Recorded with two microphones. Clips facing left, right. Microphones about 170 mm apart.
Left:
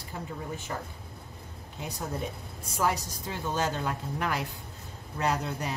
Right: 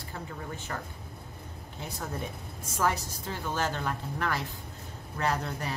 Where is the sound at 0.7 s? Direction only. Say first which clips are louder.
Left 1 dB; 10° left (ahead or behind).